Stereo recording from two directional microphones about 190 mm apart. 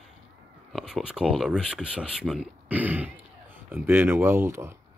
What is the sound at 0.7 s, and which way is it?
Speech, centre (ahead or behind).